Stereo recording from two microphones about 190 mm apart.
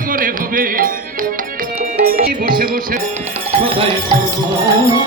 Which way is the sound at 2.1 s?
50° right (ahead or behind).